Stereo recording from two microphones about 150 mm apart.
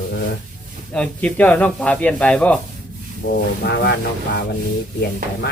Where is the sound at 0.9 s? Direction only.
10° left (ahead or behind).